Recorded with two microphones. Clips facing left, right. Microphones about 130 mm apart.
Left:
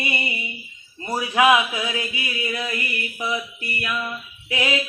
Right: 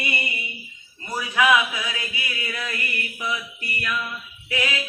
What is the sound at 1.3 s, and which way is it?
Mantra, 35° left (ahead or behind).